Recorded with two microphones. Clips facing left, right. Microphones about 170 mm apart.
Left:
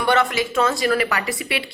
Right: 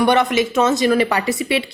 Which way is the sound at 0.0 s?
20° right (ahead or behind).